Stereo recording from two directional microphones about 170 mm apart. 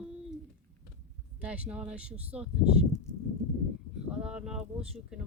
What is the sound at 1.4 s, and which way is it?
Speech, 5° right (ahead or behind).